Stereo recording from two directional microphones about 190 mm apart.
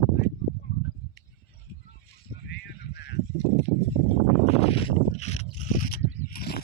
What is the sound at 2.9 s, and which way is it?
Goose, 60° left (ahead or behind).